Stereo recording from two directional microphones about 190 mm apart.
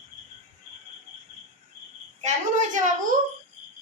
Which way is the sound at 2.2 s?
40° right (ahead or behind).